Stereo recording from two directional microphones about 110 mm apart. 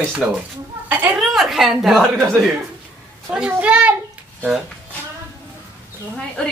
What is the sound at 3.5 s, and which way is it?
Speech, 10° right (ahead or behind).